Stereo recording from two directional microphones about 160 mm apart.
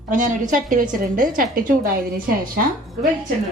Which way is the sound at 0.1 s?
55° right (ahead or behind).